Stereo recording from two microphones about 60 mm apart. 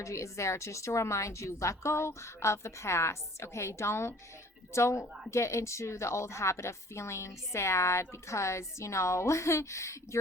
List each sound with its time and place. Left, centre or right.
0.0 s a woman's voice: left